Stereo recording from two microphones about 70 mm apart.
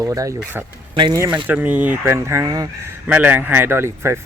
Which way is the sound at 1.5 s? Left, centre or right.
Right.